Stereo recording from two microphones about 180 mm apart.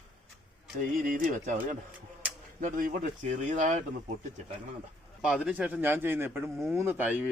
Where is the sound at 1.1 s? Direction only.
50° right (ahead or behind).